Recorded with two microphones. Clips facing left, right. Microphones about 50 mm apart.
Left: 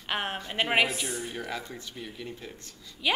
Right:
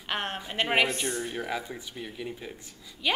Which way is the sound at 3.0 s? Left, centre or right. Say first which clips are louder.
Even; centre.